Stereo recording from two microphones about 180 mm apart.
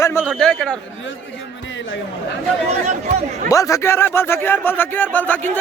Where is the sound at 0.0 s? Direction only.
15° left (ahead or behind).